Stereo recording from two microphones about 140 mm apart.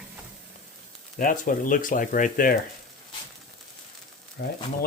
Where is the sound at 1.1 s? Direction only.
70° left (ahead or behind).